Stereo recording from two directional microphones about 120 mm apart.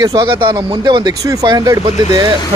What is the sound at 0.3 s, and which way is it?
Speech, 45° right (ahead or behind).